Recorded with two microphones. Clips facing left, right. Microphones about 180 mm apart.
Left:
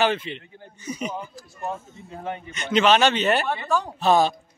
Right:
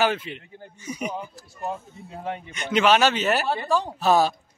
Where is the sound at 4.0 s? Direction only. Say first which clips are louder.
Left 1 dB; 5° right (ahead or behind).